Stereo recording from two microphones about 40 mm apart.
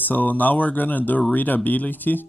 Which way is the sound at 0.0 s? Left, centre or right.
Left.